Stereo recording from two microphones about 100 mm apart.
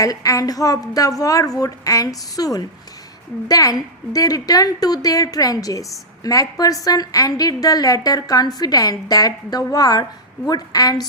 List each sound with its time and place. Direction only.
0.0 s a woman's voice: 35° left (ahead or behind)